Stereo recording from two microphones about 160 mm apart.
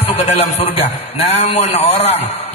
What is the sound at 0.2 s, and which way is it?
Speech, 40° left (ahead or behind).